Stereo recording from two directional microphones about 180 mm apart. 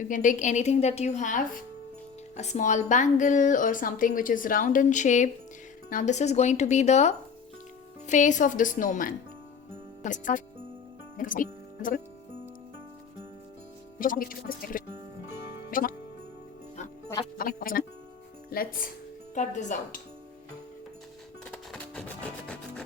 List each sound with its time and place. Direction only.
0.0 s a woman's voice: 45° left (ahead or behind)
14.0 s a woman's voice: 50° left (ahead or behind)
17.3 s a woman's voice: 50° left (ahead or behind)
19.3 s a woman's voice: 40° left (ahead or behind)
21.4 s music: 5° left (ahead or behind)